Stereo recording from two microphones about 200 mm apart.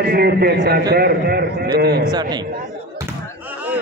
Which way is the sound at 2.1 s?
20° right (ahead or behind).